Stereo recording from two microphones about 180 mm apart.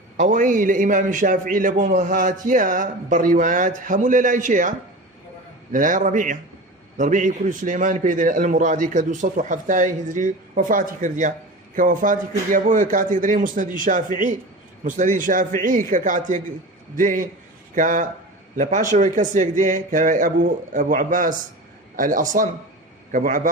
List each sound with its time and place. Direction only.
0.2 s a man's voice: 45° right (ahead or behind)
5.7 s a man's voice: 45° right (ahead or behind)